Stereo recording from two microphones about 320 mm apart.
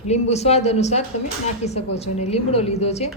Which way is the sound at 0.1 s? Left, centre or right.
Centre.